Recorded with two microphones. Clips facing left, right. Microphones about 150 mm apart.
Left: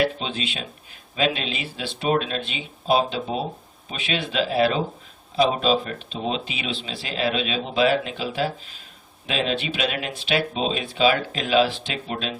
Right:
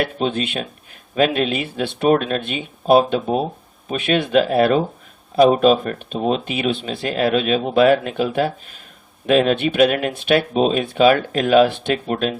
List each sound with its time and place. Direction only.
0.0 s speech: 50° right (ahead or behind)